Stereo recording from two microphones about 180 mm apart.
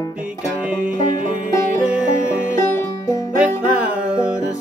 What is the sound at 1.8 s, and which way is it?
Music, 5° right (ahead or behind).